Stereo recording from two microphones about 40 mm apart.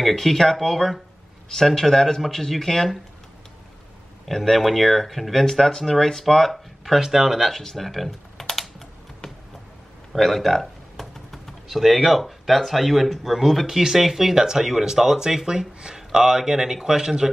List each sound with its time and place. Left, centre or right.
0.0 s speech: centre
4.6 s speech: centre
7.0 s speech: centre
7.4 s computer keyboard: centre
10.1 s speech: centre
13.7 s speech: centre